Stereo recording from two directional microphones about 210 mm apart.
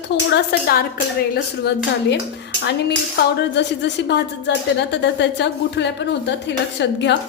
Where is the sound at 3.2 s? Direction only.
55° left (ahead or behind).